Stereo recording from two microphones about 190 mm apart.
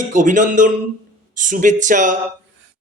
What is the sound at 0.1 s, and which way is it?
Speech, 40° right (ahead or behind).